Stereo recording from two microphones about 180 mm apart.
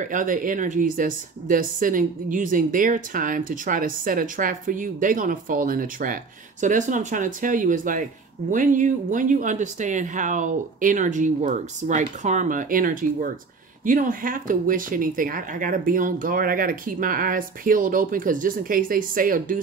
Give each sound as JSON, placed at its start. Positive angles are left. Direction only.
{"t": 0.0, "sound": "speech", "side_deg": -45}